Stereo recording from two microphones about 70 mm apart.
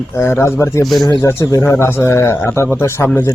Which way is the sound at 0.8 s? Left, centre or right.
Centre.